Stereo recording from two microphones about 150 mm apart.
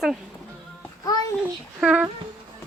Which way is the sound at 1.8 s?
10° right (ahead or behind).